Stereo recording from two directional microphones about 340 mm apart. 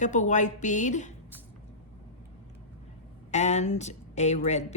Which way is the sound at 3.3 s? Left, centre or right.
Centre.